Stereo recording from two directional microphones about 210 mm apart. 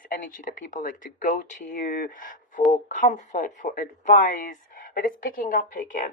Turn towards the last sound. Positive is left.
turn(degrees=40)  # may be behind; listen again after turning